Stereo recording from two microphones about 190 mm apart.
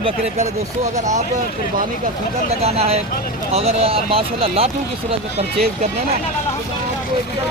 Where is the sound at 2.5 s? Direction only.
35° right (ahead or behind).